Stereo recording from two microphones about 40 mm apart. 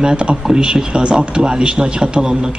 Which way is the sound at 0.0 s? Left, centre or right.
Centre.